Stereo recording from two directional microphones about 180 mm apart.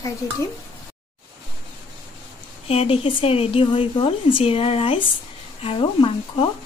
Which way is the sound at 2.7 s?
35° left (ahead or behind).